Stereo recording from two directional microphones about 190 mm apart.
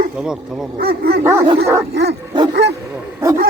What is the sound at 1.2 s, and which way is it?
Speech, 15° right (ahead or behind).